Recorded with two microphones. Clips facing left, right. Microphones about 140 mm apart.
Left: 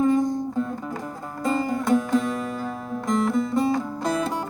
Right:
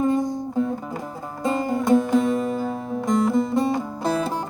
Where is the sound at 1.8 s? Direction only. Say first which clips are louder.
Right 5 dB; centre (ahead or behind).